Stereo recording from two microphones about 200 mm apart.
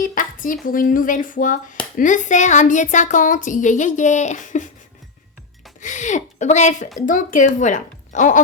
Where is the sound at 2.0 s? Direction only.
40° left (ahead or behind).